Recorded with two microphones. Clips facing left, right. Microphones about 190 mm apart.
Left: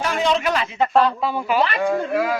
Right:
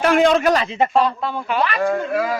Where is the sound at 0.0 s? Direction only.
60° right (ahead or behind); by 0.7 s 40° right (ahead or behind).